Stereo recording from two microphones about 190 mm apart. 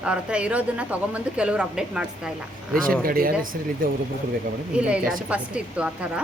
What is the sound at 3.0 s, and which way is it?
Speech, 50° right (ahead or behind).